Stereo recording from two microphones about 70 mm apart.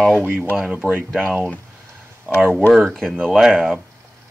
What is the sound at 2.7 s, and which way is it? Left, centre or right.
Speech, centre.